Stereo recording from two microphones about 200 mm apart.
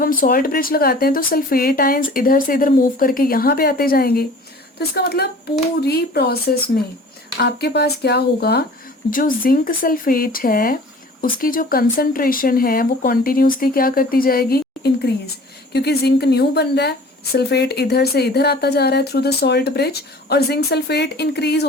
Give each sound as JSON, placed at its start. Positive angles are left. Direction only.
{"t": 0.0, "sound": "speech", "side_deg": 45}